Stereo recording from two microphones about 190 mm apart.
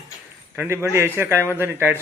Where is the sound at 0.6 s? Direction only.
10° right (ahead or behind).